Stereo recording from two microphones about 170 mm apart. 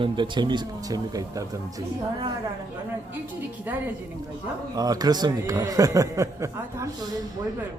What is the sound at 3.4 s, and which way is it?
Speech, 10° right (ahead or behind).